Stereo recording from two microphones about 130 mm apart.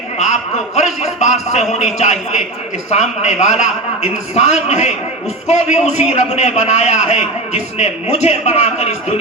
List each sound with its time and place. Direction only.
1.0 s a man's voice: 60° left (ahead or behind)